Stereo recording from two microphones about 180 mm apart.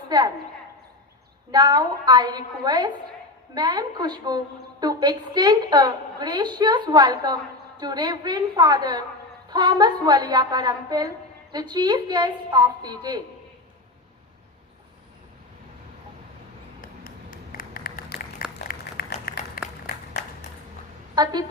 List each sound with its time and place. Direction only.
1.5 s a woman's voice: 20° right (ahead or behind)
17.5 s a sound: 50° left (ahead or behind)
19.6 s applause: 55° left (ahead or behind)
21.2 s a woman's voice: 25° right (ahead or behind)